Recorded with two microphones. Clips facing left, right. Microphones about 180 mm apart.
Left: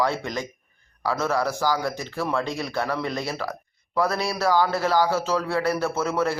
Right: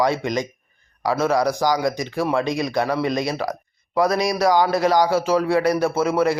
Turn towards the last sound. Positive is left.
turn(degrees=-15)  # may be behind; listen again after turning